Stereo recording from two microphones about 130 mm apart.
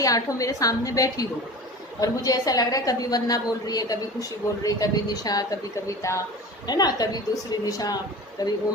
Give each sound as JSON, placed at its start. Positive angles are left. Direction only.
{"t": 0.0, "sound": "a woman's voice", "side_deg": 25}